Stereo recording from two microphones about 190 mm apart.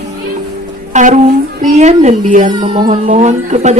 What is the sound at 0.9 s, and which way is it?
A woman's voice, 40° right (ahead or behind).